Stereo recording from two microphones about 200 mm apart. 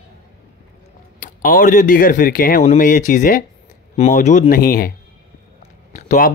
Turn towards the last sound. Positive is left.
turn(degrees=40)  # may be behind; listen again after turning